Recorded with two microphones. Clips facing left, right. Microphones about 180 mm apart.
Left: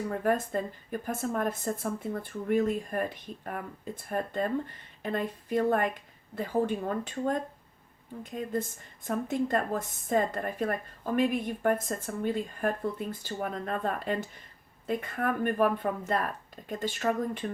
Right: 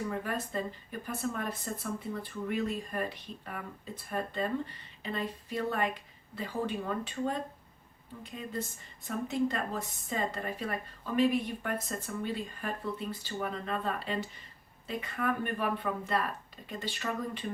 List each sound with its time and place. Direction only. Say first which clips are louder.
0.2 s a woman's voice: left 6 dB; 50° left (ahead or behind)